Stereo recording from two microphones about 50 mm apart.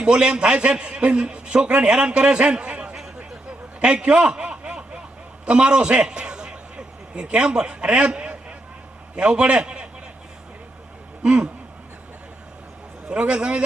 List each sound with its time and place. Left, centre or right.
0.0 s a man's voice: right
3.8 s a sound: right
9.1 s a man's voice: right
11.2 s a man's voice: right
13.1 s a man's voice: right